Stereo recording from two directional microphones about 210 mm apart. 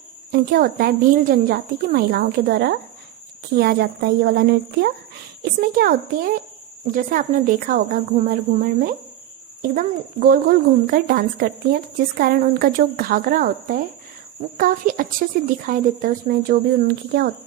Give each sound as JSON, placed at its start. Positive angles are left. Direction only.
{"t": 0.3, "sound": "speech", "side_deg": -45}